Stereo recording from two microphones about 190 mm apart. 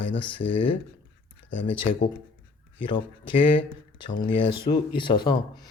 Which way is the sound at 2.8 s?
25° left (ahead or behind).